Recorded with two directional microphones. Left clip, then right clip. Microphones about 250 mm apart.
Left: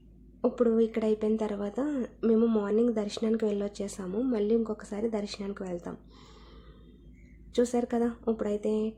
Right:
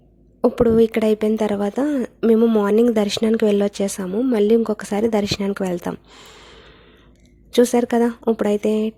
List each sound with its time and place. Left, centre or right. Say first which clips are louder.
0.4 s speech: right 10 dB; right